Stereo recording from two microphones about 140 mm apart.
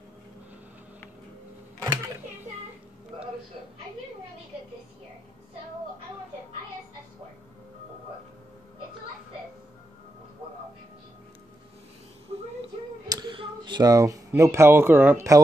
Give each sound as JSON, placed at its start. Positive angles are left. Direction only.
{"t": 13.1, "sound": "speech", "side_deg": -35}